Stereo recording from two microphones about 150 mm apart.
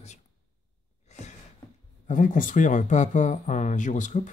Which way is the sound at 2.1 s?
60° left (ahead or behind).